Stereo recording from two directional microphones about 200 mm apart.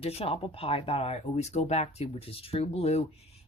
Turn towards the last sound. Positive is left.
turn(degrees=30)  # may be behind; listen again after turning